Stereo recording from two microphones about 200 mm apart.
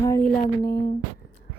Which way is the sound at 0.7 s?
45° left (ahead or behind).